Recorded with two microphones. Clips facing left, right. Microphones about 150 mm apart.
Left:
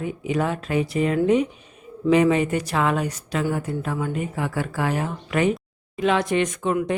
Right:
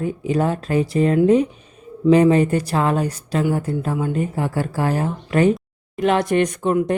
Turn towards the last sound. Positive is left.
turn(degrees=-40)  # may be behind; listen again after turning